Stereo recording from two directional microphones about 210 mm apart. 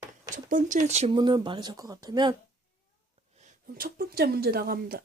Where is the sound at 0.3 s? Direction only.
40° right (ahead or behind); by 2.3 s 20° right (ahead or behind).